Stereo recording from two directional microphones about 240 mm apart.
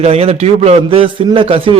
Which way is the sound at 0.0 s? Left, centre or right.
Right.